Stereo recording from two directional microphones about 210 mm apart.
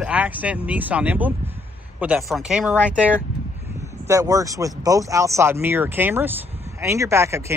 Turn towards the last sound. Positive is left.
turn(degrees=-15)  # may be behind; listen again after turning